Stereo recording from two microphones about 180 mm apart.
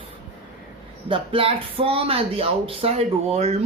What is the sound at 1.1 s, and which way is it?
Speech, 30° right (ahead or behind).